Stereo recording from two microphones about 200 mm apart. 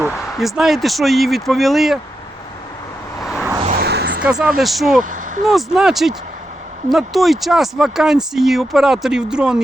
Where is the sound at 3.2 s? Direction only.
15° left (ahead or behind).